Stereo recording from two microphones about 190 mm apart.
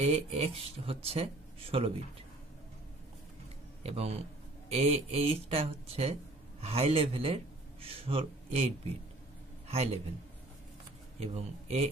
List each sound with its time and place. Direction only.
0.0 s speech: 30° right (ahead or behind)
3.8 s a man's voice: 35° right (ahead or behind)
11.1 s speech: 35° right (ahead or behind)